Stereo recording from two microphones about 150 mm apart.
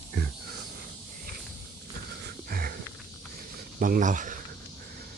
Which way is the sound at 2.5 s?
80° right.